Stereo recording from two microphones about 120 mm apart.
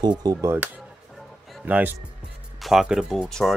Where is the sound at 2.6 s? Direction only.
Centre (ahead or behind).